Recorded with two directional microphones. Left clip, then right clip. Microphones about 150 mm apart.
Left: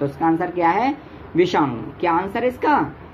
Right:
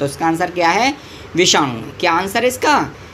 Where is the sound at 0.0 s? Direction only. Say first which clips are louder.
Right 3 dB; 25° right (ahead or behind).